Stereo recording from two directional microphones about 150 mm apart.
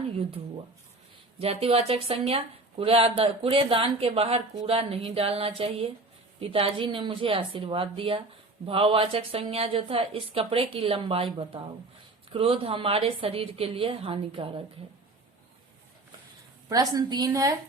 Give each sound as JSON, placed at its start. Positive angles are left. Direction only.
{"t": 0.2, "sound": "speech", "side_deg": -40}
{"t": 12.3, "sound": "speech", "side_deg": -40}
{"t": 16.6, "sound": "a woman's voice", "side_deg": -25}